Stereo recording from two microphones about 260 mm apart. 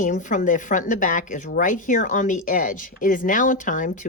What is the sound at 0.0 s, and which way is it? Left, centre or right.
A woman's voice, left.